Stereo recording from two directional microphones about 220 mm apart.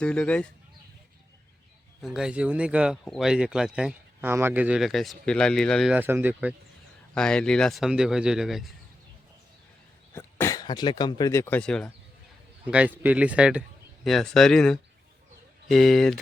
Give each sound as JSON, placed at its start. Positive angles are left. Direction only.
{"t": 0.0, "sound": "speech", "side_deg": 5}
{"t": 2.0, "sound": "speech", "side_deg": 0}
{"t": 7.1, "sound": "speech", "side_deg": 5}
{"t": 10.2, "sound": "speech", "side_deg": 10}
{"t": 12.6, "sound": "speech", "side_deg": -5}